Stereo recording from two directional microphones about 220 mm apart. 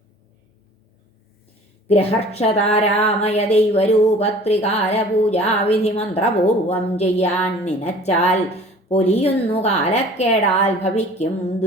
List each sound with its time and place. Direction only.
1.9 s speech: 30° left (ahead or behind)